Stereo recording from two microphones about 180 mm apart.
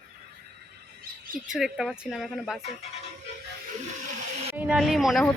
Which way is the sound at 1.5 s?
5° right (ahead or behind).